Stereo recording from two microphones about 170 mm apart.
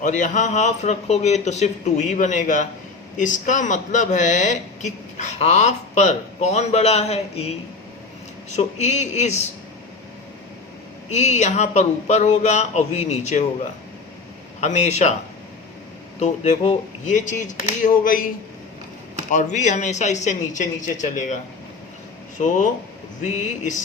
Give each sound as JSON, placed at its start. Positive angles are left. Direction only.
{"t": 0.0, "sound": "speech", "side_deg": 45}
{"t": 8.5, "sound": "speech", "side_deg": 40}
{"t": 11.1, "sound": "speech", "side_deg": 40}
{"t": 14.6, "sound": "speech", "side_deg": 40}
{"t": 16.2, "sound": "speech", "side_deg": 40}
{"t": 18.0, "sound": "a man's voice", "side_deg": 55}
{"t": 19.3, "sound": "speech", "side_deg": 45}
{"t": 22.4, "sound": "speech", "side_deg": 50}